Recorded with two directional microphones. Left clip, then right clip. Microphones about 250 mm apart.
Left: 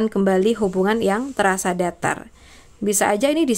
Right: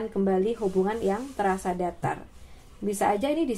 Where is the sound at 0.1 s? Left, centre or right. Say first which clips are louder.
Left 7 dB; left.